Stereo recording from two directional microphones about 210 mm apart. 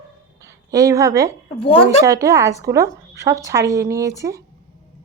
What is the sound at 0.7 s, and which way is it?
Speech, 15° right (ahead or behind).